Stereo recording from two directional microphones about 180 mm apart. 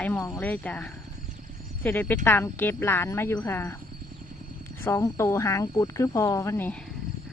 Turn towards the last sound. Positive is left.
turn(degrees=15)  # may be behind; listen again after turning